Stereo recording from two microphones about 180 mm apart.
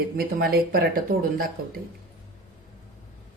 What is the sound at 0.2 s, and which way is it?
Speech, 55° right (ahead or behind).